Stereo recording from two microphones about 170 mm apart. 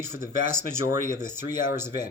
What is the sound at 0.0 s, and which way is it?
Speech, 15° right (ahead or behind).